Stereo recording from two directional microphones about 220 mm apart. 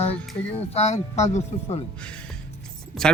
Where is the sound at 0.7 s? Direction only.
30° left (ahead or behind).